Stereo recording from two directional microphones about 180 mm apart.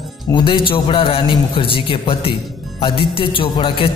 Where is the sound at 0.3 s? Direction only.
30° left (ahead or behind).